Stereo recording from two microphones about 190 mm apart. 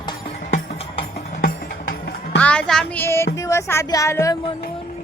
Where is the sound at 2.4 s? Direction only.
5° left (ahead or behind).